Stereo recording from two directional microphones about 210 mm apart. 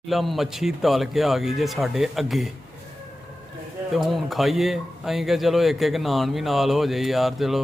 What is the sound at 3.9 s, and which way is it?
A man's voice, centre (ahead or behind).